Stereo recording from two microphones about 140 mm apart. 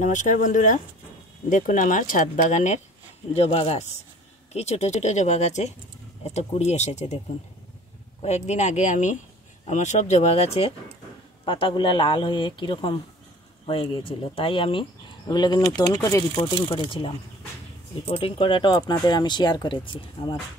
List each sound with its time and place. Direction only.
0.0 s speech: 65° left (ahead or behind)
3.3 s speech: 45° left (ahead or behind)
8.2 s speech: 50° left (ahead or behind); by 16.4 s 25° left (ahead or behind)
16.6 s speech: 40° left (ahead or behind)